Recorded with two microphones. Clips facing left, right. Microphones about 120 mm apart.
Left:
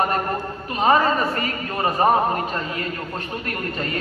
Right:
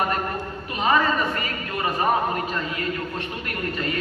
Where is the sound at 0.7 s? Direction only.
40° left (ahead or behind).